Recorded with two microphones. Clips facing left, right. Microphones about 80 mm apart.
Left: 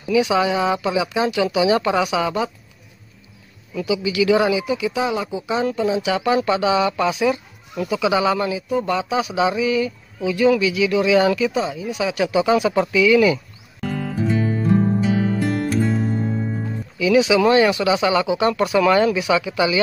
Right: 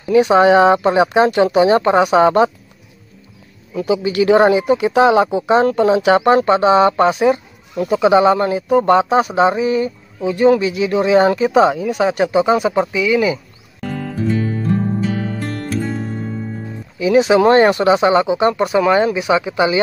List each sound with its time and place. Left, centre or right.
0.0 s speech: right
3.7 s speech: right
11.5 s speech: right
13.7 s music: centre
17.0 s speech: right